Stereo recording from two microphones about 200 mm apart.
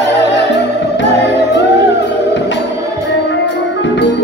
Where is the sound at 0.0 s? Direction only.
60° left (ahead or behind).